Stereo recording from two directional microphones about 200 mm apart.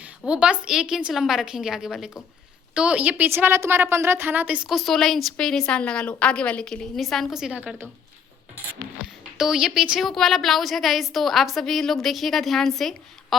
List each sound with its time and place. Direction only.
0.0 s a woman's voice: 5° right (ahead or behind)
9.4 s a woman's voice: centre (ahead or behind)